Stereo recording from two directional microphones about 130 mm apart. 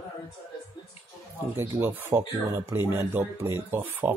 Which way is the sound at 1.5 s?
20° right (ahead or behind).